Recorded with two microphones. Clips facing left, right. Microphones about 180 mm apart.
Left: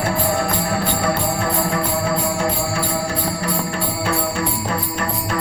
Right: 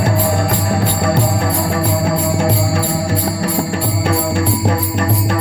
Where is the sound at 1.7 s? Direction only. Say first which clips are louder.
Right 4 dB; 65° right (ahead or behind).